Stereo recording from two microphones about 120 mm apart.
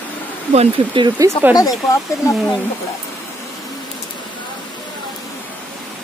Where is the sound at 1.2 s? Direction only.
25° right (ahead or behind).